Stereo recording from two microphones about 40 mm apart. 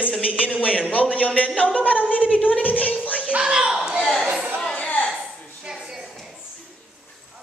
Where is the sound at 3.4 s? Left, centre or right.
Right.